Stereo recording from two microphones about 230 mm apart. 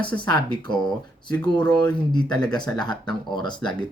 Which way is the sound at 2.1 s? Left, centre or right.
Centre.